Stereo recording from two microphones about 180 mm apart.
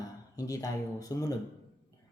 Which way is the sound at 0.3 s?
20° left (ahead or behind).